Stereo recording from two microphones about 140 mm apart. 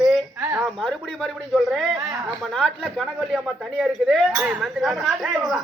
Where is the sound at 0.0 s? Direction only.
Centre (ahead or behind).